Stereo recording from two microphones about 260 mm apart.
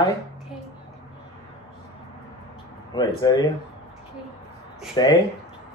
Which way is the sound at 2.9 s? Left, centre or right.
Centre.